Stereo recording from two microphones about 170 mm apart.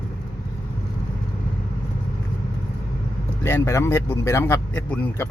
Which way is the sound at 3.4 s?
15° left (ahead or behind).